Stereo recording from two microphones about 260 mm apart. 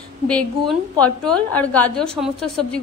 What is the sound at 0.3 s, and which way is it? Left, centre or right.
A woman's voice, centre.